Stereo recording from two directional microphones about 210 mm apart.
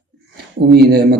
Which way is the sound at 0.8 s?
50° right (ahead or behind).